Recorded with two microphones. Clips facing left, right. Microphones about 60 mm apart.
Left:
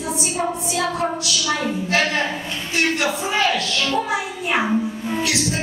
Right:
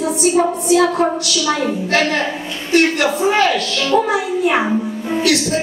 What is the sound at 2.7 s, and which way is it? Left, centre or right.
A woman's voice, right.